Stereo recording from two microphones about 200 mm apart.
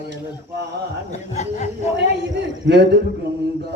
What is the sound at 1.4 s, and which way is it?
Speech, 35° left (ahead or behind).